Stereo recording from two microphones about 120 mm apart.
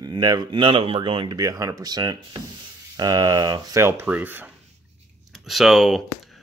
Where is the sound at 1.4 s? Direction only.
30° right (ahead or behind).